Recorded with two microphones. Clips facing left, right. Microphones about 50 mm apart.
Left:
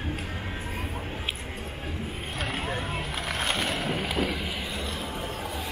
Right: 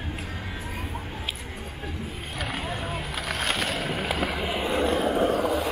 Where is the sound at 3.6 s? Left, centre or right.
Centre.